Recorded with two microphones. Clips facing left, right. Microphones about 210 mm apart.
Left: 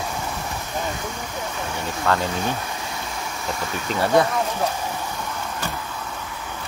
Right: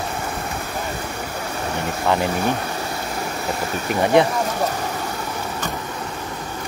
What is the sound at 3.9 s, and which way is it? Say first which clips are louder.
Speech: right 3 dB; 20° right (ahead or behind).